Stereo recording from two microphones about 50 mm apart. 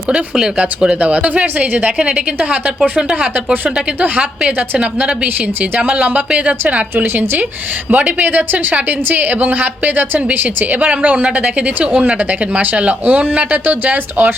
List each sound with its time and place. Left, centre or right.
0.5 s a woman's voice: right
4.8 s a woman's voice: right
6.9 s a woman's voice: right